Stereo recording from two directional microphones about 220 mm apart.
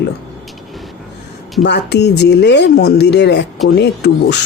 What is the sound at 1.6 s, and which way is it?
Speech, 50° left (ahead or behind).